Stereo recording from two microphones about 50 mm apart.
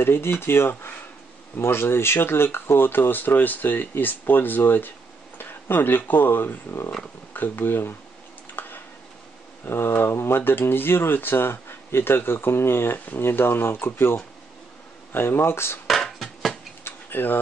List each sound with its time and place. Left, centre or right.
0.0 s speech: left
8.5 s a sound: left
9.7 s speech: left
12.9 s speech: left
13.2 s speech: left
16.8 s tick-tock: left